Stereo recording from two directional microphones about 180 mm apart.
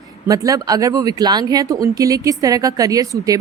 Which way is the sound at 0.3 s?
20° right (ahead or behind).